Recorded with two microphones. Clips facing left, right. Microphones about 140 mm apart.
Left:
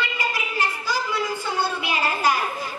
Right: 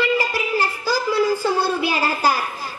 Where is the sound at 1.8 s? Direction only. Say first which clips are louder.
Right 3 dB; 35° right (ahead or behind).